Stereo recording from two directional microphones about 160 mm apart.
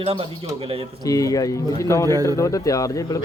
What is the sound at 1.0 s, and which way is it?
Speech, 20° left (ahead or behind).